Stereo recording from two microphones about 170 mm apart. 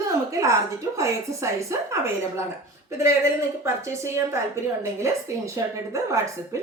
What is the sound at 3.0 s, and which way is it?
Speech, 15° right (ahead or behind).